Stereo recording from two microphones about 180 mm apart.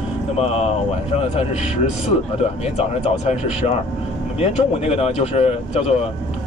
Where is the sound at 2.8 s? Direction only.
40° left (ahead or behind).